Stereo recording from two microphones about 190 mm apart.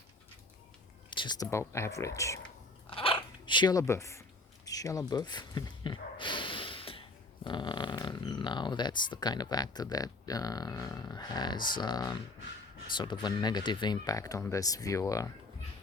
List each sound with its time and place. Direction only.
1.1 s speech: 25° left (ahead or behind)
2.9 s dog: 30° left (ahead or behind)
4.6 s a sound: 20° left (ahead or behind)
7.4 s speech: 25° left (ahead or behind)